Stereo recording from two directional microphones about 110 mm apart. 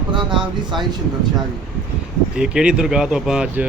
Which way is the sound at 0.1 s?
45° right (ahead or behind).